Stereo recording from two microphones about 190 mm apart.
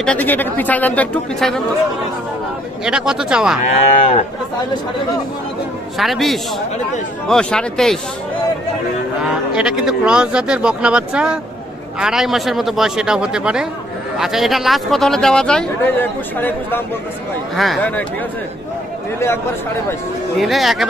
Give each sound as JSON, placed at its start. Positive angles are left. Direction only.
{"t": 0.0, "sound": "speech", "side_deg": 10}
{"t": 2.8, "sound": "speech", "side_deg": -5}
{"t": 3.6, "sound": "moo", "side_deg": 35}
{"t": 5.9, "sound": "speech", "side_deg": 0}
{"t": 9.2, "sound": "speech", "side_deg": -5}
{"t": 19.1, "sound": "speech", "side_deg": 15}
{"t": 20.3, "sound": "speech", "side_deg": 0}